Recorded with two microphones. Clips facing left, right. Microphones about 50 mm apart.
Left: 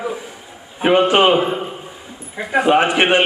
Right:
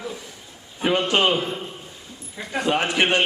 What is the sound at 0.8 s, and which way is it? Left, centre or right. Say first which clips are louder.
A man's voice: left 7 dB; left.